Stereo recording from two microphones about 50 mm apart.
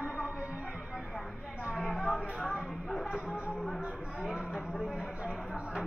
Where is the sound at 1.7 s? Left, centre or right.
Centre.